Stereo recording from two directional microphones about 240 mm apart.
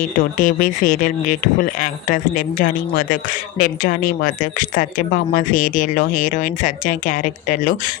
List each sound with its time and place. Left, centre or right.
0.2 s a woman's voice: left